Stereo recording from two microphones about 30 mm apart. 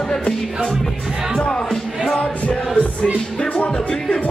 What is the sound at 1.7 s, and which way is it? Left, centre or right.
Music, centre.